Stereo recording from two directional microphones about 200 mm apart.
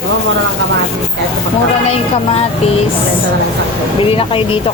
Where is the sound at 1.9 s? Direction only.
30° left (ahead or behind).